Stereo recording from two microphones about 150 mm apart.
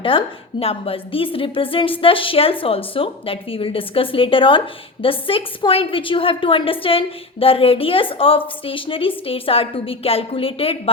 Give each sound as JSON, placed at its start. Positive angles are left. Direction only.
{"t": 0.0, "sound": "a woman's voice", "side_deg": 35}